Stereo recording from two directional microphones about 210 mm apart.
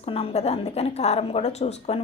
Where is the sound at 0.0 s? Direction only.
25° left (ahead or behind).